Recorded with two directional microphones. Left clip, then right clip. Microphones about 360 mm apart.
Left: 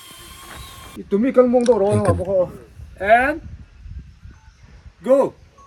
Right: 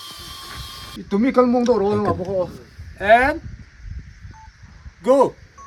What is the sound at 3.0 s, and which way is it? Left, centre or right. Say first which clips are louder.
Speech: right 1 dB; centre.